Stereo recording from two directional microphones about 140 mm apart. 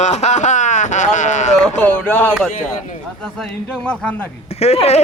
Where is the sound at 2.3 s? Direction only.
Centre (ahead or behind).